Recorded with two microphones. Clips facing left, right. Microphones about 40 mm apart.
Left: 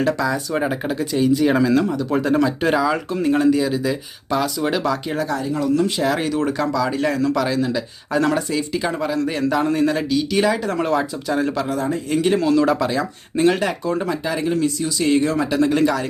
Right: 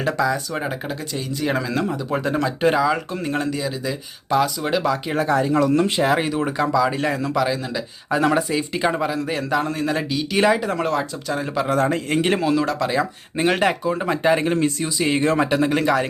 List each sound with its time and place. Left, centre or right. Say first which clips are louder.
0.0 s speech: left 1 dB; centre
0.5 s speech: left 5 dB; centre
5.1 s speech: right 4 dB; right
6.1 s speech: left 1 dB; centre
7.4 s speech: left 3 dB; centre; by 9.0 s right
9.0 s speech: left 3 dB; centre
10.7 s speech: left 2 dB; centre
11.7 s a man's voice: right 2 dB; right
12.4 s speech: left 3 dB; centre; by 13.7 s right
13.8 s speech: left 1 dB; centre
14.1 s speech: right 3 dB; right
14.9 s speech: left 4 dB; right
15.3 s speech: right 2 dB; right
15.5 s speech: left 1 dB; centre